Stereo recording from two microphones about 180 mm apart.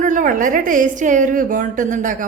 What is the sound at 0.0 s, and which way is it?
A man's voice, 45° right (ahead or behind).